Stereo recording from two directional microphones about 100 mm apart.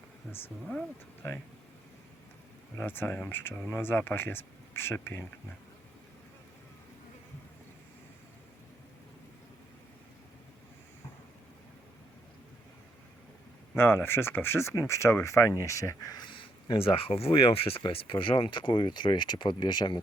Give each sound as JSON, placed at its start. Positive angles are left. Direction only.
{"t": 2.7, "sound": "speech", "side_deg": 20}
{"t": 13.7, "sound": "speech", "side_deg": 25}